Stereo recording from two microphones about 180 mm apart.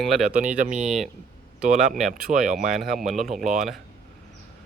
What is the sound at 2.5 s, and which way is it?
Speech, 45° right (ahead or behind).